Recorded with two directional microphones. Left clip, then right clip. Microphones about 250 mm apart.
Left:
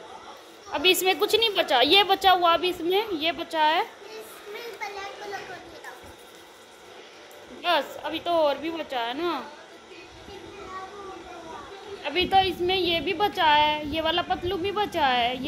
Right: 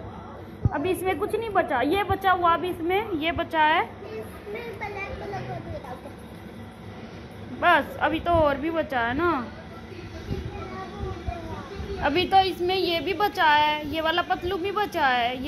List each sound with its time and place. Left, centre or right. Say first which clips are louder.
0.7 s a woman's voice: left 4 dB; left
7.6 s speech: right 5 dB; centre
12.0 s speech: right 2 dB; centre